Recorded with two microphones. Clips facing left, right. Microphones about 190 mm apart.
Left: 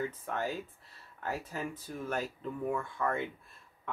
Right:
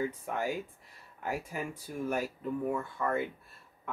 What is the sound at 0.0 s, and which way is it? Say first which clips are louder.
Speech: right 2 dB; 10° right (ahead or behind).